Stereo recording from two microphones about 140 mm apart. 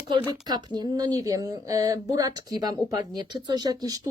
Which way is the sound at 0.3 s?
30° right (ahead or behind).